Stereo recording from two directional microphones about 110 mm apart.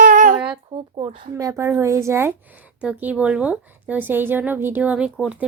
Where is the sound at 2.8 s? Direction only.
15° right (ahead or behind).